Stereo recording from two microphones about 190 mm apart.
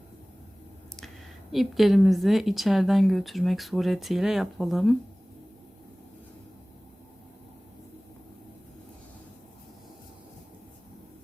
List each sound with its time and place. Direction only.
1.5 s a woman's voice: centre (ahead or behind)